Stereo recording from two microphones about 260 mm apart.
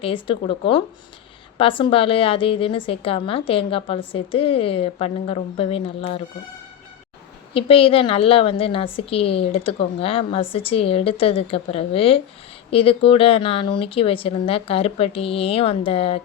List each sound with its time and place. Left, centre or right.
0.0 s a woman's voice: centre
7.5 s a woman's voice: left